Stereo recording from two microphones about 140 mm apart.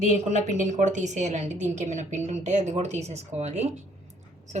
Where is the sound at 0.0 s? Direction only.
55° right (ahead or behind).